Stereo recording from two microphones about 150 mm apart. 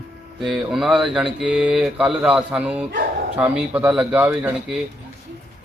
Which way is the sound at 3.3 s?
10° right (ahead or behind).